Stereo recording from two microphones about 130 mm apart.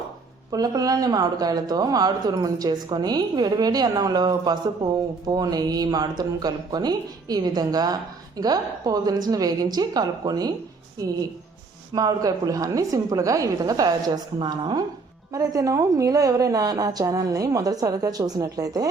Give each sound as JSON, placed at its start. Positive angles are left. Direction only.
{"t": 0.5, "sound": "speech", "side_deg": -30}
{"t": 11.9, "sound": "a woman's voice", "side_deg": -30}